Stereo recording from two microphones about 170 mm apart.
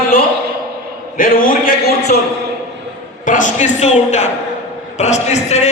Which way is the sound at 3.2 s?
45° left (ahead or behind).